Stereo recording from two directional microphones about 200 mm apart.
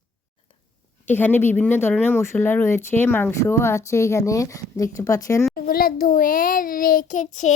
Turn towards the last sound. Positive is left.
turn(degrees=35)  # may be behind; listen again after turning